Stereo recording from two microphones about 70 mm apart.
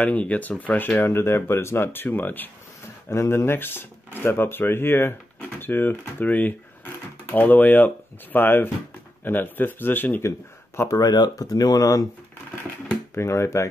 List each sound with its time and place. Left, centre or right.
0.0 s speech: left
3.1 s speech: left
10.8 s speech: left
13.1 s speech: left